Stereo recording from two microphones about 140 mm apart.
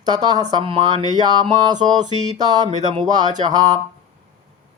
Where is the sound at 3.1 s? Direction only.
30° right (ahead or behind).